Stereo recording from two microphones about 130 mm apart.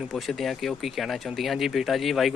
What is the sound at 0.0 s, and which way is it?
Speech, centre (ahead or behind).